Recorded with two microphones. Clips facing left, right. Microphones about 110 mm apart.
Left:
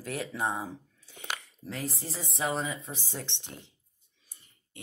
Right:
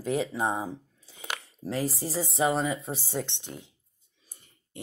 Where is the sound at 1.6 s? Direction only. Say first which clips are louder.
Right 8 dB; 90° right.